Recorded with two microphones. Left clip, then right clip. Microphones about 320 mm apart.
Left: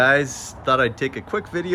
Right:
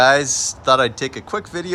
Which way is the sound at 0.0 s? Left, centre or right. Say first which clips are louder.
Right 3 dB; centre.